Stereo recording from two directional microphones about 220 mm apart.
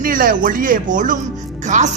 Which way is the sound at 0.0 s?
40° right (ahead or behind).